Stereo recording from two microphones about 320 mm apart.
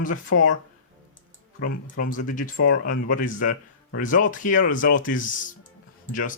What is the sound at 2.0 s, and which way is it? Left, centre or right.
Speech, left.